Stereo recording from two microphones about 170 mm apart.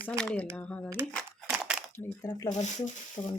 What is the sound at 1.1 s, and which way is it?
Crumpling, 5° left (ahead or behind).